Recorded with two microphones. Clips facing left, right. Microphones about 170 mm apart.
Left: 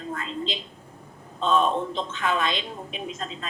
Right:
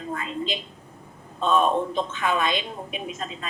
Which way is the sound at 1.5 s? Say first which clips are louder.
Right 1 dB; 50° right (ahead or behind).